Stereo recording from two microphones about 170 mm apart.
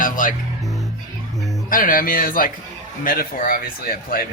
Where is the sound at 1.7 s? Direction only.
55° left (ahead or behind).